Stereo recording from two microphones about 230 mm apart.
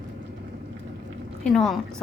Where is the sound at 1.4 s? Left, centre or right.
Centre.